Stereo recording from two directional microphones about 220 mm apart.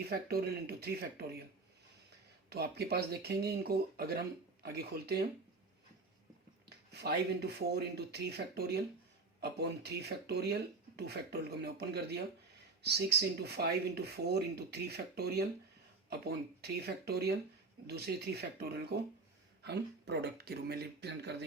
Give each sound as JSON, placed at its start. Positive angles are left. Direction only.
{"t": 0.0, "sound": "speech", "side_deg": -45}
{"t": 2.5, "sound": "speech", "side_deg": -45}
{"t": 6.7, "sound": "speech", "side_deg": -50}